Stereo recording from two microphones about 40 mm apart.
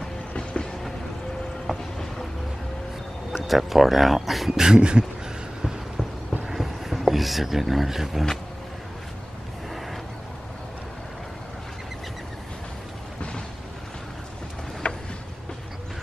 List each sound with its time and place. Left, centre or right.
0.4 s vehicle: left
1.7 s boat: centre
3.4 s speech: centre
4.6 s a sound: centre
6.4 s a sound: centre
14.8 s vehicle: left